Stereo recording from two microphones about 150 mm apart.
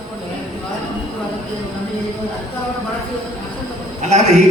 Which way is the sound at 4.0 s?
50° right (ahead or behind).